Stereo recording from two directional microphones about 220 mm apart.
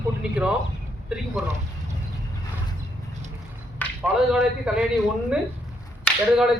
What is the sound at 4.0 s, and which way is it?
Speech, 5° right (ahead or behind).